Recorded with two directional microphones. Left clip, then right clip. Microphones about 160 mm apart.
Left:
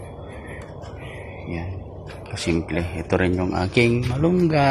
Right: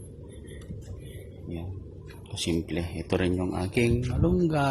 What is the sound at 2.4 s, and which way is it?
Speech, 35° right (ahead or behind).